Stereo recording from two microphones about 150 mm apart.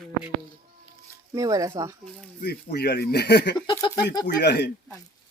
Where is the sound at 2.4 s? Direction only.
90° left.